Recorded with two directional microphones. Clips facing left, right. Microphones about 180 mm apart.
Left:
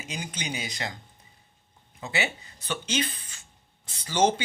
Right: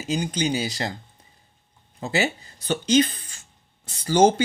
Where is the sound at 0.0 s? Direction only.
35° right (ahead or behind).